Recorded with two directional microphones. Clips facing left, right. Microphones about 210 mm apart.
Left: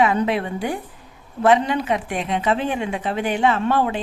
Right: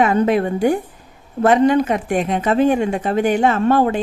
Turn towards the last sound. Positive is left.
turn(degrees=-45)  # may be behind; listen again after turning